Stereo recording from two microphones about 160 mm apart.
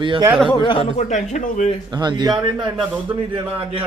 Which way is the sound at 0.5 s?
30° left (ahead or behind).